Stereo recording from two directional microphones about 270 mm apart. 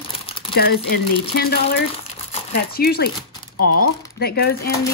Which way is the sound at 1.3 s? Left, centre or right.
Left.